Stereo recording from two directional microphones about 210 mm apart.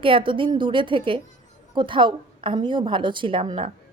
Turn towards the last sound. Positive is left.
turn(degrees=-25)  # may be behind; listen again after turning